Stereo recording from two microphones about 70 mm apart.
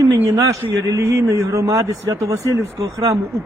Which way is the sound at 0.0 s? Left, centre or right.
Right.